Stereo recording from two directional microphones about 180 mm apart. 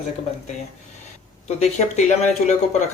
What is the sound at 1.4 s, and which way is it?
Speech, 40° left (ahead or behind).